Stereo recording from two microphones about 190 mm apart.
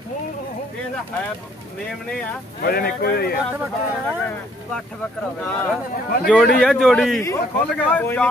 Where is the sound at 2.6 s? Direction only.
50° left (ahead or behind).